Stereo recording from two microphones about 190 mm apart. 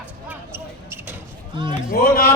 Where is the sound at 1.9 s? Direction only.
50° left (ahead or behind).